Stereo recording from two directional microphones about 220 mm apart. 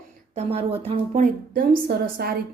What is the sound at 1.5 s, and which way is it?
Speech, 40° right (ahead or behind).